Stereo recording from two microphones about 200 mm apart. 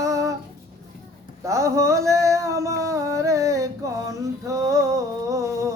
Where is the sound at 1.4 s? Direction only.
15° right (ahead or behind).